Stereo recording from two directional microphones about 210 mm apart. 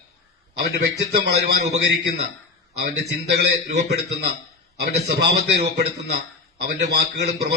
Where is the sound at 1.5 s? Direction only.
50° right (ahead or behind).